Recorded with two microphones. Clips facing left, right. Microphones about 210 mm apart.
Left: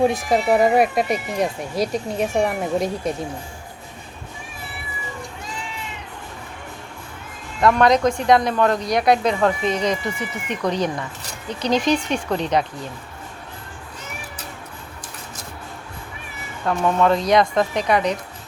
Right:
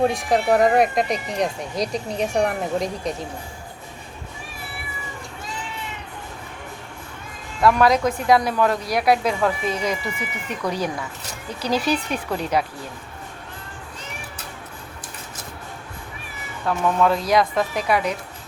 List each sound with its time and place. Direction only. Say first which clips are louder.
0.0 s speech: left 1 dB; centre (ahead or behind)
7.6 s speech: left 1 dB; 5° right (ahead or behind)
9.9 s speech: left 3 dB; 20° left (ahead or behind)
10.5 s speech: left 3 dB; 5° right (ahead or behind)
16.6 s speech: left 2 dB; centre (ahead or behind)